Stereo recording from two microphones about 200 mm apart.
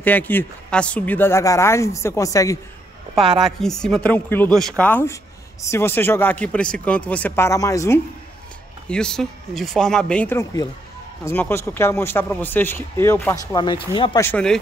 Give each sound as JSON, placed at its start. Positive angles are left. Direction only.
{"t": 0.0, "sound": "a man's voice", "side_deg": 10}
{"t": 3.3, "sound": "a man's voice", "side_deg": 0}
{"t": 8.8, "sound": "a man's voice", "side_deg": 5}
{"t": 14.2, "sound": "speech", "side_deg": 5}